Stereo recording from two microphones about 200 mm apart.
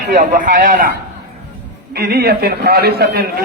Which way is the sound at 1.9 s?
50° right (ahead or behind).